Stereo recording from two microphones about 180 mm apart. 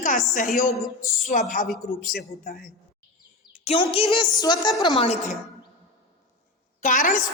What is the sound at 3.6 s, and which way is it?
A woman's voice, 30° left (ahead or behind).